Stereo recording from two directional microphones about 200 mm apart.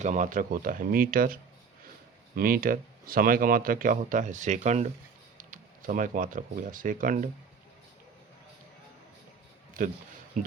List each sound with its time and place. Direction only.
0.0 s speech: 40° right (ahead or behind)
9.8 s speech: 45° right (ahead or behind)
10.4 s a sound: 40° right (ahead or behind)